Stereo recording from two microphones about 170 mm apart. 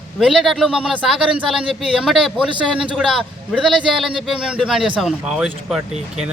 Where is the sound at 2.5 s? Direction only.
30° right (ahead or behind).